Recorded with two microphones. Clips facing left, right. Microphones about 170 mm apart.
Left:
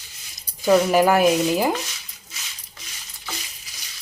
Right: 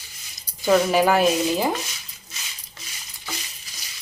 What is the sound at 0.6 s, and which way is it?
Speech, 10° left (ahead or behind).